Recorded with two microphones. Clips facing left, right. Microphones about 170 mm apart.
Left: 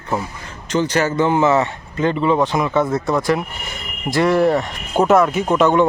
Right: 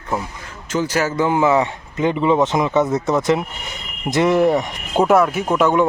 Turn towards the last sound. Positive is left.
turn(degrees=-5)  # may be behind; listen again after turning